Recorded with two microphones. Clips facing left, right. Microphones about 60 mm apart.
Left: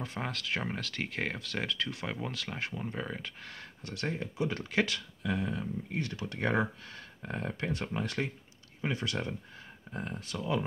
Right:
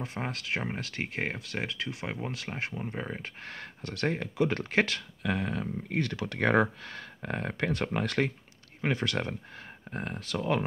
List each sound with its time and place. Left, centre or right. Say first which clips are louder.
0.0 s speech: right 1 dB; right
2.7 s speech: right 1 dB; centre
3.2 s speech: right 3 dB; right
9.8 s speech: right 3 dB; right